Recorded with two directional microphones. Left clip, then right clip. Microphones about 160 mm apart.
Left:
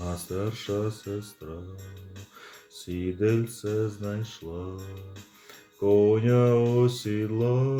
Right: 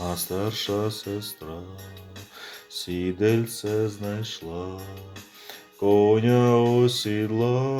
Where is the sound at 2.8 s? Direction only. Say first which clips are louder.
Right 3 dB; 5° left (ahead or behind).